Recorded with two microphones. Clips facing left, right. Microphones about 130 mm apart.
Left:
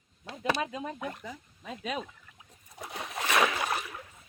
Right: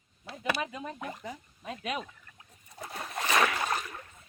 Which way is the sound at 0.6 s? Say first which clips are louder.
Left 2 dB; 20° left (ahead or behind).